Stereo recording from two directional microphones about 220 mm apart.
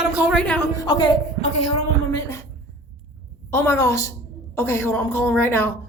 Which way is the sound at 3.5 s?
10° left (ahead or behind).